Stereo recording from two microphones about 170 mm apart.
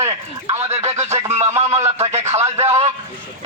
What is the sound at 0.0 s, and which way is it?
Speech, 20° right (ahead or behind).